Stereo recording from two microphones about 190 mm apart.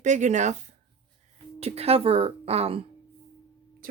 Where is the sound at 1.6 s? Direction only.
30° right (ahead or behind).